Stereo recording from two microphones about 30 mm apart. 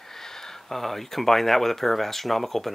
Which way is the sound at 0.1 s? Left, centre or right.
Centre.